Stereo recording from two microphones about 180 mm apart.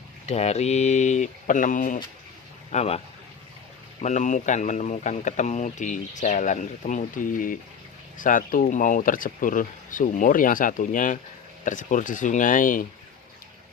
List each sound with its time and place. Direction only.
0.3 s speech: 35° left (ahead or behind)
2.7 s speech: 35° left (ahead or behind)
4.0 s speech: 45° left (ahead or behind)